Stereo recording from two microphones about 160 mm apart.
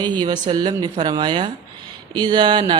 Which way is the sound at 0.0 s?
30° right (ahead or behind).